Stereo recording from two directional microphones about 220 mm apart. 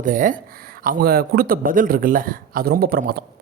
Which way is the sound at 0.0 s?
35° right (ahead or behind).